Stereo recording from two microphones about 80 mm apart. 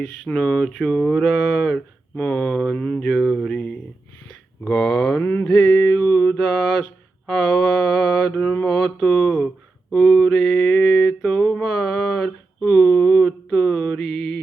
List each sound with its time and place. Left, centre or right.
0.3 s speech: centre
1.7 s mantra: centre
3.1 s speech: centre
4.7 s mantra: centre
5.2 s mantra: left
5.5 s mantra: centre
6.3 s mantra: centre
8.6 s speech: centre
9.9 s mantra: centre
12.6 s a sound: centre
14.0 s mantra: centre